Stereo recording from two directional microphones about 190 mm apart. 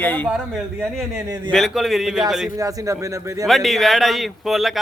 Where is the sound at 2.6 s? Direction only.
20° right (ahead or behind).